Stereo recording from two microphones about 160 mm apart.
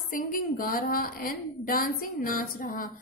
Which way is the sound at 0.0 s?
60° left (ahead or behind).